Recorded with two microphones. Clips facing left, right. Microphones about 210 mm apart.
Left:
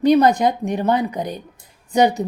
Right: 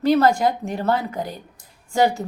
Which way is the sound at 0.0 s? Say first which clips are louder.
Left 3 dB; 20° left (ahead or behind).